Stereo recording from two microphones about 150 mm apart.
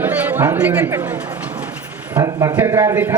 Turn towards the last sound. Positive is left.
turn(degrees=-10)  # may be behind; listen again after turning